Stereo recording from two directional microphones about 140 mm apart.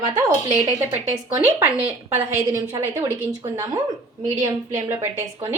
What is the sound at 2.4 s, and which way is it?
Speech, 25° right (ahead or behind).